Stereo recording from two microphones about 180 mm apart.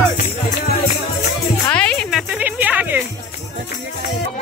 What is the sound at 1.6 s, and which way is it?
Music, 5° left (ahead or behind).